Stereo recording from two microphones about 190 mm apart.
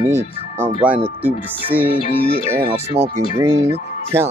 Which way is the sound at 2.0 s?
30° left (ahead or behind).